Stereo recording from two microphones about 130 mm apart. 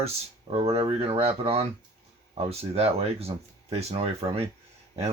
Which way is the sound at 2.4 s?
50° right (ahead or behind).